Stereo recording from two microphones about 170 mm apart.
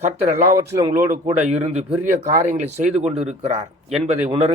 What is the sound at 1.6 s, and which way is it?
Speech, 40° right (ahead or behind).